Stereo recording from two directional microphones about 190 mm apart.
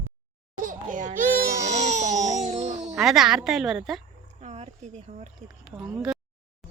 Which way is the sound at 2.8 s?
Centre (ahead or behind).